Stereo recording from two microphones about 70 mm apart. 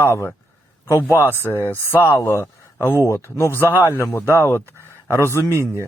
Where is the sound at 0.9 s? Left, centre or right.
Left.